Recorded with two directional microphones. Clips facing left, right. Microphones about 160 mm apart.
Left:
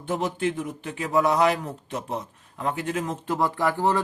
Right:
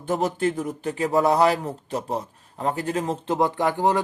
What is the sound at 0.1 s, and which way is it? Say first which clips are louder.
Speech: right 3 dB; 40° right (ahead or behind).